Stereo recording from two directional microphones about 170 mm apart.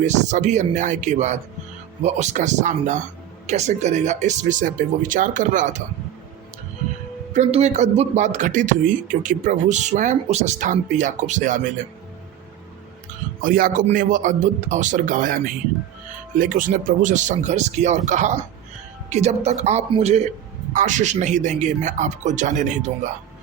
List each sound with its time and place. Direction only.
0.0 s a man's voice: 45° right (ahead or behind)
7.3 s a man's voice: 40° right (ahead or behind)
13.4 s a man's voice: 55° right (ahead or behind)
16.4 s a man's voice: 55° right (ahead or behind)